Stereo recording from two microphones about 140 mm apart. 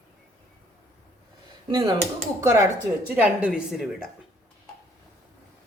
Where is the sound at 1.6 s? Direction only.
30° right (ahead or behind).